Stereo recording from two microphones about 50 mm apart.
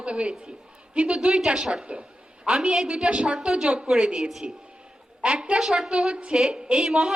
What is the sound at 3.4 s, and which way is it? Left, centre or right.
A woman's voice, centre.